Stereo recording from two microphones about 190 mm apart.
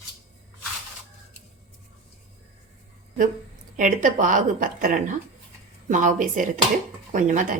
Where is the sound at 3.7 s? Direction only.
45° right (ahead or behind).